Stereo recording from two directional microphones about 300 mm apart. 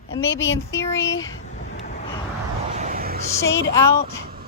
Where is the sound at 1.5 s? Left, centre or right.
Left.